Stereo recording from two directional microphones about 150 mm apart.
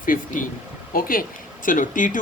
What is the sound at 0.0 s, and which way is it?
Speech, 65° left (ahead or behind).